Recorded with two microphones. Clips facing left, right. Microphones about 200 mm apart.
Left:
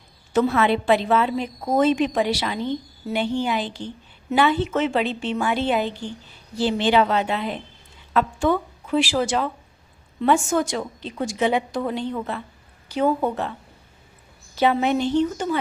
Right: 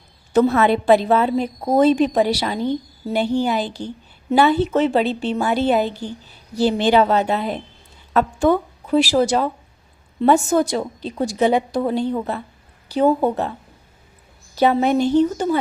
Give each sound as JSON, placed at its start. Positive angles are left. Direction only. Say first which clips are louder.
{"t": 0.3, "sound": "a woman's voice", "louder": "right 4 dB", "side_deg": -40}
{"t": 14.5, "sound": "a woman's voice", "louder": "right 3 dB", "side_deg": -40}